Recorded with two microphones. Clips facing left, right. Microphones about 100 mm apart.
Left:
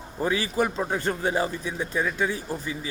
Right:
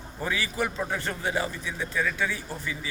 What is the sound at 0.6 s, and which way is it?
Speech, 25° left (ahead or behind).